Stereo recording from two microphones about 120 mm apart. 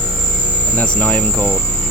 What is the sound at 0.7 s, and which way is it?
Speech, 10° left (ahead or behind).